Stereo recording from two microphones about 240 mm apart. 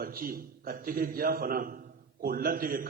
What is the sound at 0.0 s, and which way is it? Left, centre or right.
A man's voice, right.